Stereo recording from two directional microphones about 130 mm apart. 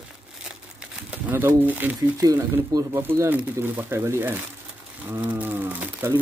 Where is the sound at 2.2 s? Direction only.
25° right (ahead or behind).